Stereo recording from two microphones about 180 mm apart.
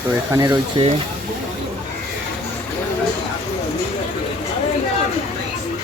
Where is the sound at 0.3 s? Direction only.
15° right (ahead or behind).